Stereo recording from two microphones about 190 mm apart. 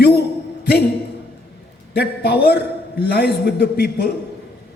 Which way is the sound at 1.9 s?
55° left (ahead or behind).